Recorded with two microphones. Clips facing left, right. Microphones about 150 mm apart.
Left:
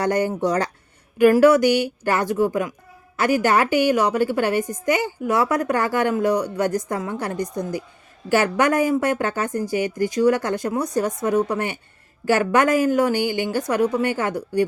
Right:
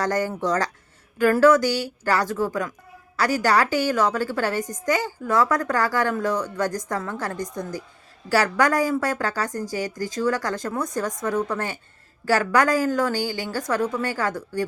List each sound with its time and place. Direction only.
0.0 s a woman's voice: 15° left (ahead or behind)